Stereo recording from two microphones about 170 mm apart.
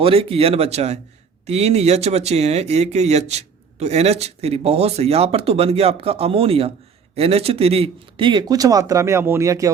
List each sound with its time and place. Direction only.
0.0 s speech: 35° right (ahead or behind); by 9.6 s 20° right (ahead or behind)